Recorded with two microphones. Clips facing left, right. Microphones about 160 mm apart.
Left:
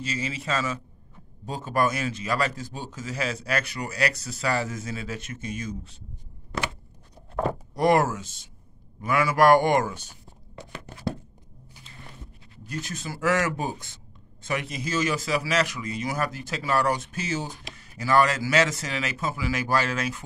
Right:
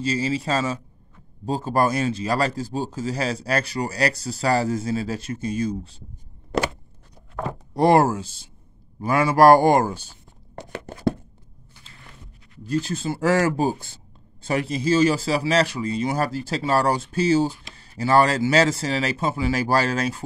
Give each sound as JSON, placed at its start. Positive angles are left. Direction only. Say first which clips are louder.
{"t": 0.0, "sound": "a man's voice", "louder": "right 8 dB", "side_deg": -35}
{"t": 7.7, "sound": "a man's voice", "louder": "right 5 dB", "side_deg": -30}
{"t": 12.6, "sound": "a man's voice", "louder": "right 10 dB", "side_deg": -30}